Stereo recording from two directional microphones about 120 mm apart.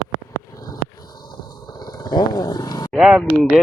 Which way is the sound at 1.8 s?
35° left (ahead or behind).